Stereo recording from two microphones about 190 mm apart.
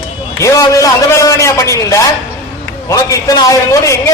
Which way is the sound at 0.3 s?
15° left (ahead or behind).